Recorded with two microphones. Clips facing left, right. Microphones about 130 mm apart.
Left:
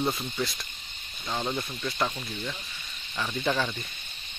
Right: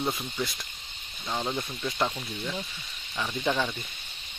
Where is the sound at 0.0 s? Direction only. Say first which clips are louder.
Left 2 dB; 5° right (ahead or behind).